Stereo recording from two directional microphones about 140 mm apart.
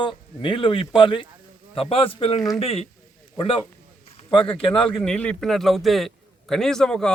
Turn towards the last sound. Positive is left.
turn(degrees=5)  # may be behind; listen again after turning